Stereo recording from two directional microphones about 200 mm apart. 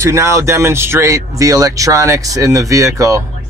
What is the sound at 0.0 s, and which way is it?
Speech, 15° right (ahead or behind).